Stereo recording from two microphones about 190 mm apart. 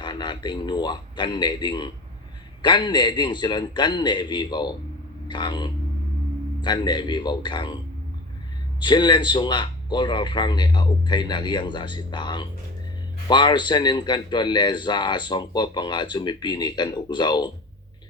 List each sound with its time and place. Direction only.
0.0 s a man's voice: 25° left (ahead or behind)
8.8 s a man's voice: 25° left (ahead or behind)